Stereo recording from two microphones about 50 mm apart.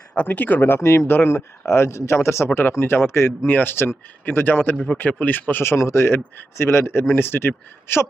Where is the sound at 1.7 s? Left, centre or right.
Left.